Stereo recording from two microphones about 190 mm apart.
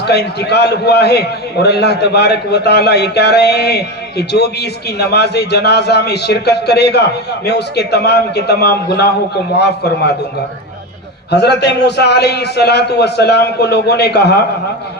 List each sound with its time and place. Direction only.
0.0 s a man's voice: 60° left (ahead or behind)
11.3 s a man's voice: 60° left (ahead or behind)